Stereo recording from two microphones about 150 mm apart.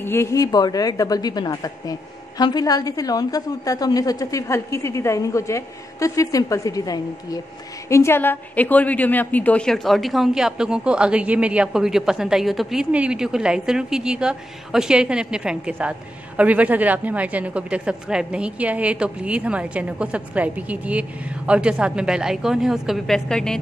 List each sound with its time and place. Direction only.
0.0 s a woman's voice: 15° left (ahead or behind)